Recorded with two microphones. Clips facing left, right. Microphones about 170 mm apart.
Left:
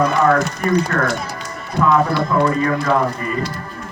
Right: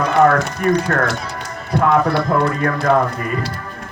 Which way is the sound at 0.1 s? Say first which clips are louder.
Right 2 dB; 55° right (ahead or behind).